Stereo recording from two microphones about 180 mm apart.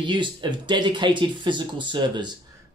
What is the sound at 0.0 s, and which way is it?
Speech, 25° right (ahead or behind).